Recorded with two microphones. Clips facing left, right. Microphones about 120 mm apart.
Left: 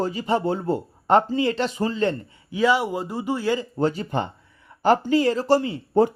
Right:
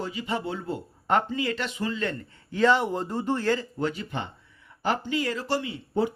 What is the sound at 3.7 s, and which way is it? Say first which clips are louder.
Speech: left 6 dB; 35° left (ahead or behind).